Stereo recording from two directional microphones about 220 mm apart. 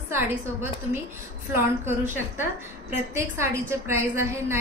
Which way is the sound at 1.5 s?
10° right (ahead or behind).